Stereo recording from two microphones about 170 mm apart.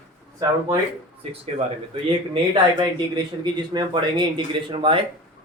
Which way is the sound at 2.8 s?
25° right (ahead or behind).